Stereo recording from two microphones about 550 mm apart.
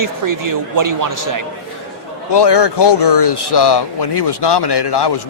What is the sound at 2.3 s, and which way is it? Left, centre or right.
Speech, left.